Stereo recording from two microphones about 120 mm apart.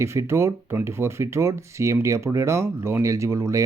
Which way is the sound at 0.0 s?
25° right (ahead or behind).